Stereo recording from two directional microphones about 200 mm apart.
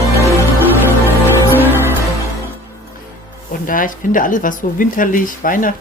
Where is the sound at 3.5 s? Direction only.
45° left (ahead or behind).